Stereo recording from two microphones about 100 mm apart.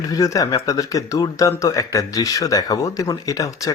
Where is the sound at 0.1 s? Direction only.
35° left (ahead or behind).